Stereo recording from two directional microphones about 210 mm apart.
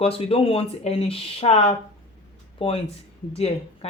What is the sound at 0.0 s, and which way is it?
Speech, 25° left (ahead or behind).